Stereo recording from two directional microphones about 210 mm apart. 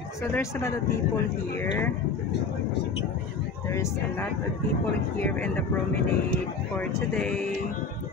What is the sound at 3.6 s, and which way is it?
Speech, 10° left (ahead or behind).